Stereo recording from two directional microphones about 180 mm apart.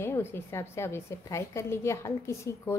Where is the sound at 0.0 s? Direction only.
15° left (ahead or behind).